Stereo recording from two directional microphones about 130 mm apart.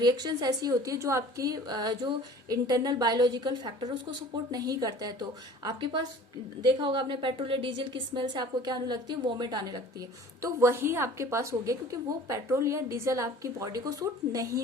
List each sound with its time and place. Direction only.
0.0 s a woman's voice: 35° right (ahead or behind)
10.4 s a woman's voice: 20° right (ahead or behind)